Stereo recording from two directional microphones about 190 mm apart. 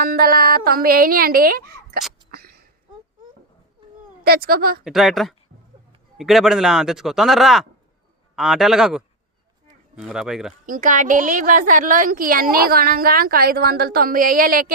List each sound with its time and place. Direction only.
0.0 s a woman's voice: 50° right (ahead or behind)
2.3 s a sound: 55° right (ahead or behind)
4.2 s a woman's voice: 55° right (ahead or behind)
4.8 s speech: centre (ahead or behind)
10.7 s a woman's voice: 45° right (ahead or behind)